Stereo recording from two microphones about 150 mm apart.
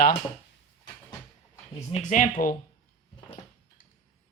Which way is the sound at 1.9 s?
55° left (ahead or behind).